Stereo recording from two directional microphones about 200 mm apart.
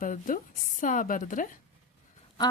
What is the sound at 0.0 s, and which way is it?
A woman's voice, 40° left (ahead or behind).